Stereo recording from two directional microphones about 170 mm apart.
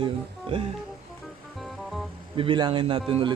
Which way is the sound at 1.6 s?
Centre (ahead or behind).